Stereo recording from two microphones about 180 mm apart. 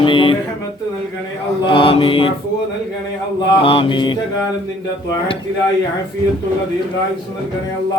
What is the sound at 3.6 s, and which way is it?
Mantra, 30° left (ahead or behind).